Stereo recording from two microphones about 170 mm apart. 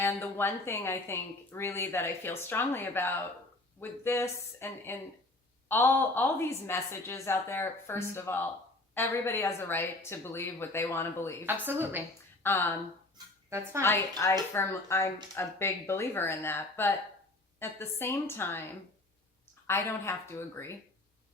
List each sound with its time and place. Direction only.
0.0 s a woman's voice: 10° left (ahead or behind)
11.4 s a woman's voice: 10° right (ahead or behind)
12.4 s speech: 10° left (ahead or behind)
13.1 s a sound: 15° right (ahead or behind)
14.2 s a woman's voice: 15° left (ahead or behind)
19.6 s a woman's voice: 15° left (ahead or behind)